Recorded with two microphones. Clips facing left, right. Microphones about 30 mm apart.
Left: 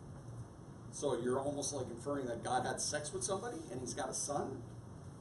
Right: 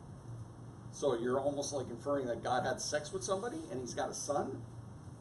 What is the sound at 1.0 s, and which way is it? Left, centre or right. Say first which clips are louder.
Speech: right 3 dB; centre.